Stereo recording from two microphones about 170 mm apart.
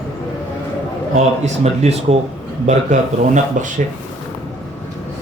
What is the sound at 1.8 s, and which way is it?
A man's voice, 40° right (ahead or behind).